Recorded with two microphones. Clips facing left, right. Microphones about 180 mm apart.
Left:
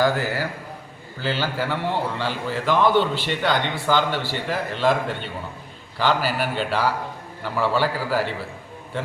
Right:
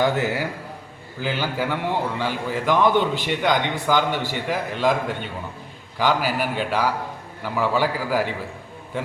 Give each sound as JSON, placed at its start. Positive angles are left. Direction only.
{"t": 0.0, "sound": "a man's voice", "side_deg": -20}